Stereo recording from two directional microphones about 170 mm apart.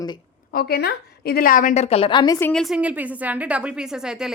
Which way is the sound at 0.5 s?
65° left (ahead or behind).